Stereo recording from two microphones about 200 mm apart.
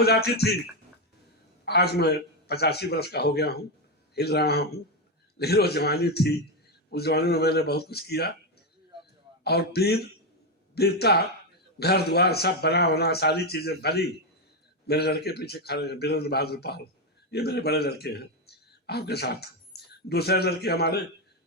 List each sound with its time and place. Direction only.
0.0 s a man's voice: 55° left (ahead or behind)
1.6 s a man's voice: 55° left (ahead or behind)
9.4 s a man's voice: 55° left (ahead or behind)